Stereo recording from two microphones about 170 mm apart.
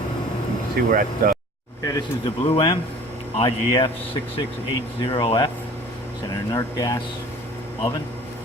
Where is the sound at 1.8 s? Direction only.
20° left (ahead or behind).